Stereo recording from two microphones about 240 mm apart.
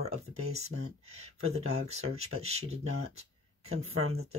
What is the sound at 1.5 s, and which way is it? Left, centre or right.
Speech, right.